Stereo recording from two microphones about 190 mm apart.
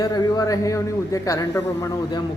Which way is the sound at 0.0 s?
20° left (ahead or behind).